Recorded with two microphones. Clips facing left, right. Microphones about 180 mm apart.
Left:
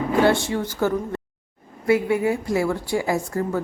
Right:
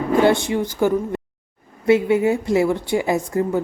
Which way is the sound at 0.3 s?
15° right (ahead or behind).